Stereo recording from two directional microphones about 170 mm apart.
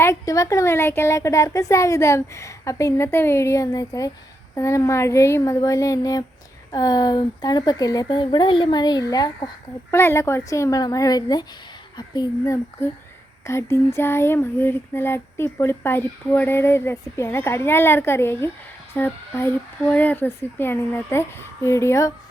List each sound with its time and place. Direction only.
0.0 s speech: 15° left (ahead or behind)